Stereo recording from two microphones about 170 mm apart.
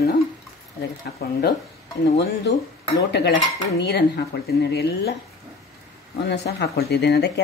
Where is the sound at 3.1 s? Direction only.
80° left.